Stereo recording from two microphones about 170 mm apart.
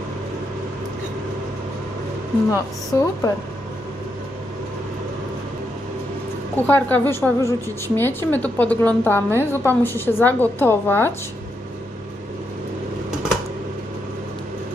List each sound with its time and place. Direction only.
2.5 s a woman's voice: 20° left (ahead or behind)
6.7 s a woman's voice: 10° left (ahead or behind)